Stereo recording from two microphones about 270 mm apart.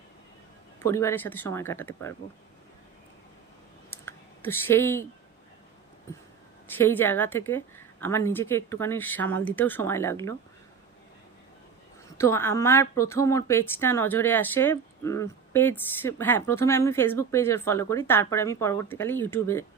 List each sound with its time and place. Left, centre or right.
0.8 s a woman's voice: centre
3.8 s clicking: centre
6.7 s a woman's voice: centre
12.1 s a woman's voice: centre